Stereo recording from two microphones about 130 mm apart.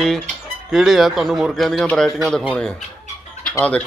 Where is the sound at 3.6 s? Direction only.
10° left (ahead or behind).